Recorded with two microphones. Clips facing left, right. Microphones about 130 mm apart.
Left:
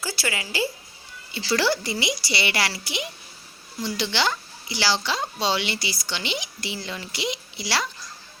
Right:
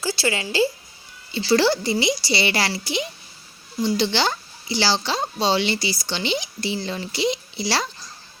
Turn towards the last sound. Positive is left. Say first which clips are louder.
# right 3 dB
turn(degrees=-30)  # may be behind; listen again after turning